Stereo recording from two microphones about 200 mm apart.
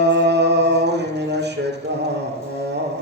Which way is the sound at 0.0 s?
60° right (ahead or behind).